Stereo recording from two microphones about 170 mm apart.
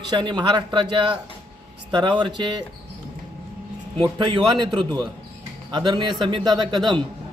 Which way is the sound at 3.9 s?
30° right (ahead or behind).